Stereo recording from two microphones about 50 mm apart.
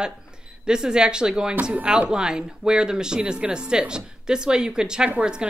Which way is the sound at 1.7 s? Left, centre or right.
Right.